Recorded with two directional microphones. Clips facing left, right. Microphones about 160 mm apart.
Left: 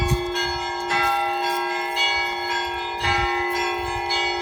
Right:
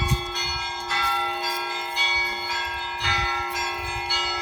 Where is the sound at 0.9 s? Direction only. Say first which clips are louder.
Left 5 dB; 55° left (ahead or behind).